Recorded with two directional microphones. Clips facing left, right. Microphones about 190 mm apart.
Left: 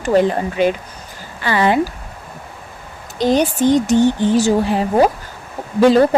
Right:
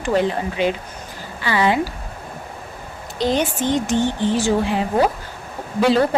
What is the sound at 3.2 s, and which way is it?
A woman's voice, 40° left (ahead or behind).